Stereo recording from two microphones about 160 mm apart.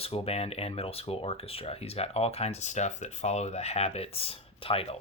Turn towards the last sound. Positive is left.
turn(degrees=35)  # may be behind; listen again after turning